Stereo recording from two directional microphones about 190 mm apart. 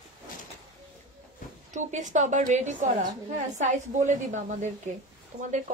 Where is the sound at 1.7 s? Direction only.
40° right (ahead or behind).